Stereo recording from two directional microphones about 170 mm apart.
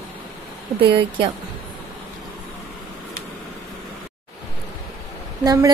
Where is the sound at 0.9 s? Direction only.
30° right (ahead or behind).